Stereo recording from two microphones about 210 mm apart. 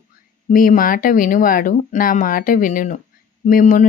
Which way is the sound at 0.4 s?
40° left (ahead or behind).